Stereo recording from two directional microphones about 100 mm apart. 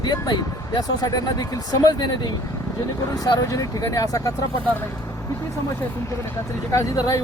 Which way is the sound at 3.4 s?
30° left (ahead or behind).